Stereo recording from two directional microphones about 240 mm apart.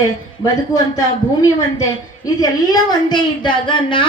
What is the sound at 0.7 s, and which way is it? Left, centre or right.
A woman's voice, centre.